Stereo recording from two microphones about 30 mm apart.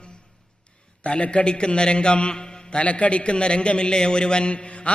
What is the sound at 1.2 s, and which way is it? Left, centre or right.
A man's voice, left.